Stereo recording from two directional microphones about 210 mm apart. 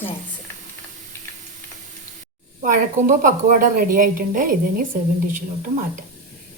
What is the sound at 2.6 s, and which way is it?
A woman's voice, 40° right (ahead or behind).